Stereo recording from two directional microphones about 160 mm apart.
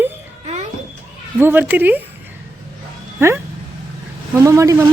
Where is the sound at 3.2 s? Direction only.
15° right (ahead or behind).